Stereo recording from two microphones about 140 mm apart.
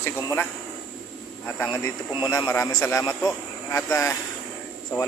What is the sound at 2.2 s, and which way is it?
Speech, 30° left (ahead or behind).